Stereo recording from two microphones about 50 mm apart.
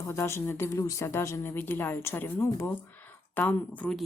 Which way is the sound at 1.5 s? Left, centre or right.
Left.